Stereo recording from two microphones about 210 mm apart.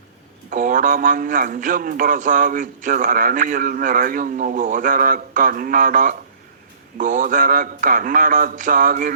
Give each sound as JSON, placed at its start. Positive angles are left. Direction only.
{"t": 0.5, "sound": "a man's voice", "side_deg": -40}